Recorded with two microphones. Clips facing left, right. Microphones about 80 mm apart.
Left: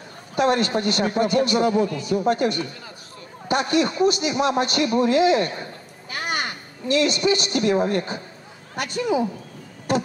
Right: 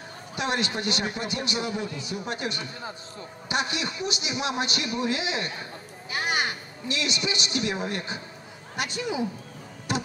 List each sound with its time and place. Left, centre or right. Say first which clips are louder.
0.4 s a man's voice: left 8 dB; left
9.9 s music: left 7 dB; left